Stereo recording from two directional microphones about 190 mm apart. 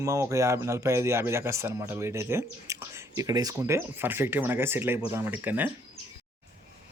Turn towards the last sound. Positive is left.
turn(degrees=-10)  # may be behind; listen again after turning